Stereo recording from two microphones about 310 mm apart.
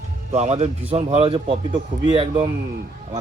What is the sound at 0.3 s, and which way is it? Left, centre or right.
A man's voice, right.